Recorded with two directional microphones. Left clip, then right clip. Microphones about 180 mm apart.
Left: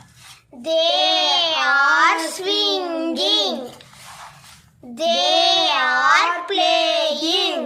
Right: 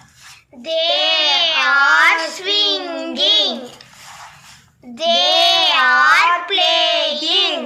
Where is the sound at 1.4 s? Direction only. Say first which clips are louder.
Right 3 dB; 55° left (ahead or behind).